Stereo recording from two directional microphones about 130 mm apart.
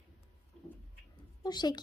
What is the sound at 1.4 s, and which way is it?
Speech, 30° left (ahead or behind).